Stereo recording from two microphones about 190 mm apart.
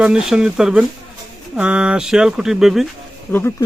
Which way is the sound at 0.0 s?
5° right (ahead or behind).